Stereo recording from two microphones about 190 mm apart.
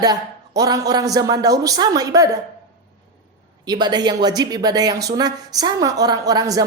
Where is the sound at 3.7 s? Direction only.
20° right (ahead or behind).